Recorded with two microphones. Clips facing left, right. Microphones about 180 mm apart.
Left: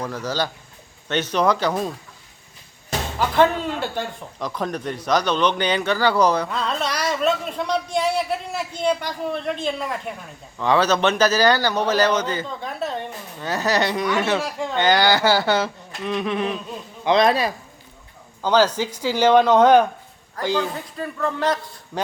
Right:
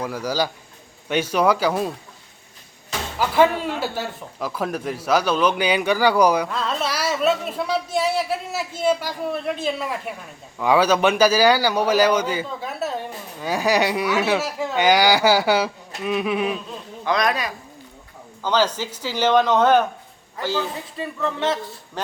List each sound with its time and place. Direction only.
0.0 s a man's voice: 10° right (ahead or behind)
3.2 s a man's voice: 10° right (ahead or behind)
17.1 s speech: 25° left (ahead or behind)
18.4 s speech: 10° left (ahead or behind)